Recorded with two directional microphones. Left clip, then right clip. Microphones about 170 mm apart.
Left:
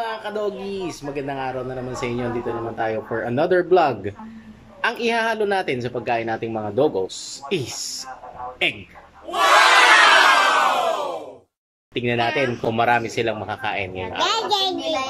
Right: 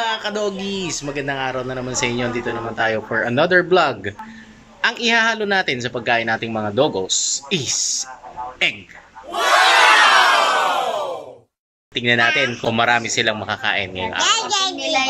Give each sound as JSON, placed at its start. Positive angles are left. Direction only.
{"t": 0.0, "sound": "a man's voice", "side_deg": 5}
{"t": 9.3, "sound": "crowd", "side_deg": 0}
{"t": 11.9, "sound": "a man's voice", "side_deg": 5}
{"t": 14.2, "sound": "a child's voice", "side_deg": 25}
{"t": 14.8, "sound": "a child's voice", "side_deg": -10}